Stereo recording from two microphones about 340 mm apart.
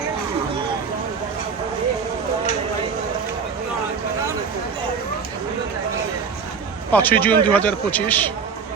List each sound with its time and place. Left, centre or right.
6.9 s speech: centre